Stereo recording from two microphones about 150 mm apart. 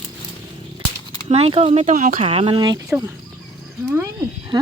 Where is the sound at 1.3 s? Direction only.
40° right (ahead or behind).